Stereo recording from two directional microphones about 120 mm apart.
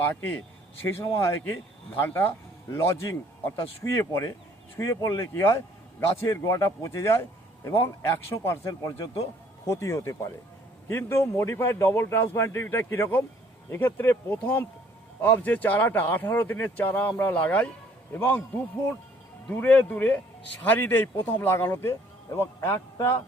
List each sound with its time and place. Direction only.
0.0 s a man's voice: 15° left (ahead or behind)